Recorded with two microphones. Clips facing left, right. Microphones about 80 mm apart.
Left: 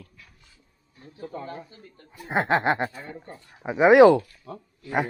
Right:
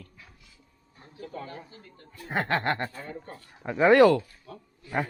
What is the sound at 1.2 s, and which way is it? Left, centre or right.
Speech, left.